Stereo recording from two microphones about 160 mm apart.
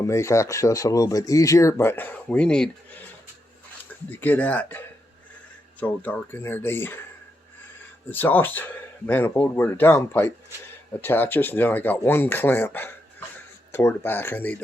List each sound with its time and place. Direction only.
0.0 s speech: 20° left (ahead or behind)
4.2 s speech: 10° left (ahead or behind)
8.1 s speech: 10° left (ahead or behind)